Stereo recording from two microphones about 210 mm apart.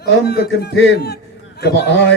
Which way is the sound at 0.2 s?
50° left (ahead or behind).